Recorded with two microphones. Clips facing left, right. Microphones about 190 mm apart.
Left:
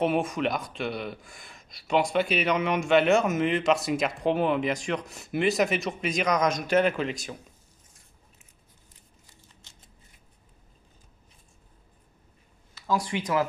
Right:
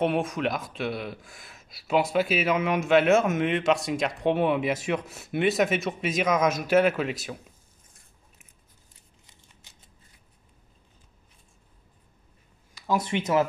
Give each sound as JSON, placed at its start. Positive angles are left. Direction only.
{"t": 0.0, "sound": "speech", "side_deg": 0}
{"t": 12.7, "sound": "speech", "side_deg": -20}